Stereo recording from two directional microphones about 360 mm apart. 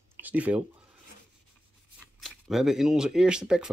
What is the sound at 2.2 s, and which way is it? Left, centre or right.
Speech, centre.